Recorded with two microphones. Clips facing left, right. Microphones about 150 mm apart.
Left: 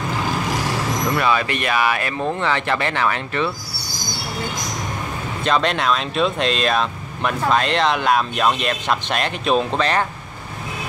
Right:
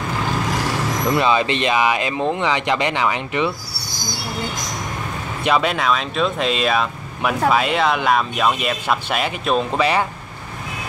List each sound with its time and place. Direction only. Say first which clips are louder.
1.1 s speech: right 4 dB; 20° right (ahead or behind)
5.4 s speech: right 1 dB; 10° right (ahead or behind)